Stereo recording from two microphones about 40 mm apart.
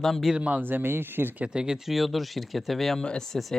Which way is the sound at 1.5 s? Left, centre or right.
Centre.